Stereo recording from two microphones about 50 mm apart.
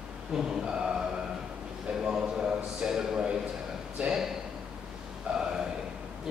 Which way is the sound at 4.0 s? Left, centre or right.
Right.